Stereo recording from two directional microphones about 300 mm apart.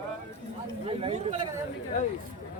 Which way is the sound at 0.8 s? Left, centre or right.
Centre.